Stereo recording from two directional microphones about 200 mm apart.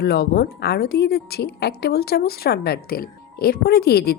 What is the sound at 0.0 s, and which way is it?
A woman's voice, 50° left (ahead or behind).